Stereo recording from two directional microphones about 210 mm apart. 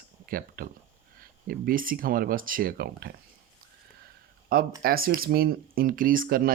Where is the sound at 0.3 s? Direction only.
40° right (ahead or behind).